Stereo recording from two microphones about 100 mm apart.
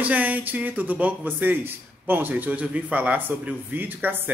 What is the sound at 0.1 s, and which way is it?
Speech, 15° right (ahead or behind).